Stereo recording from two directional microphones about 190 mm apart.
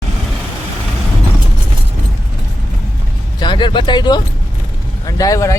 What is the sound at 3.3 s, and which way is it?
Speech, 25° left (ahead or behind).